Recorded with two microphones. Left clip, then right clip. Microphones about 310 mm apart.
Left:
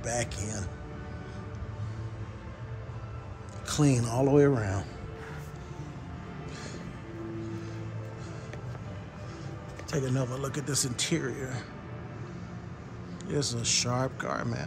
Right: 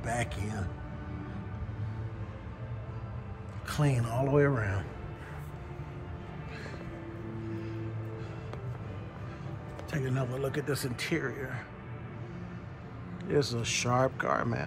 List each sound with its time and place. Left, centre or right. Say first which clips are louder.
0.0 s speech: left 1 dB; centre
3.6 s speech: left 5 dB; centre
9.8 s speech: left 3 dB; centre
13.3 s speech: even; centre